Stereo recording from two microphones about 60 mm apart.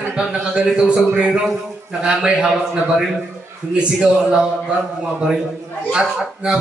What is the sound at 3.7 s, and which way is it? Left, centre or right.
Speech, centre.